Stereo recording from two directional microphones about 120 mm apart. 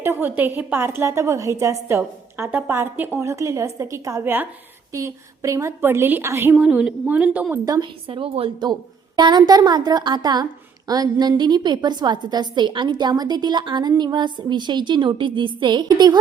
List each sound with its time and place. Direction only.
0.0 s a woman's voice: 20° right (ahead or behind)
6.6 s a woman's voice: 10° right (ahead or behind)
7.6 s a woman's voice: 30° right (ahead or behind)
8.0 s a woman's voice: 50° right (ahead or behind)